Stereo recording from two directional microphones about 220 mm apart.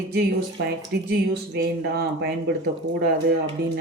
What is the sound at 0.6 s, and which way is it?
Speech, 50° right (ahead or behind).